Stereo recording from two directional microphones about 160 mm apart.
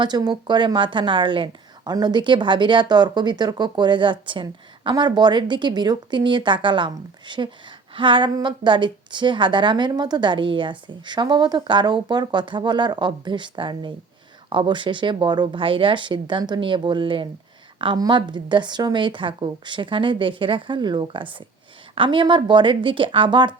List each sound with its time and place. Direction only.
0.0 s a woman's voice: 25° right (ahead or behind)